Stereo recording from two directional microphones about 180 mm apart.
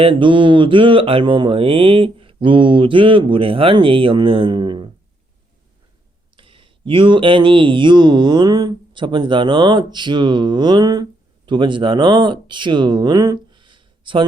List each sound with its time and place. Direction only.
0.0 s speech: 30° right (ahead or behind)
6.3 s speech: 30° right (ahead or behind)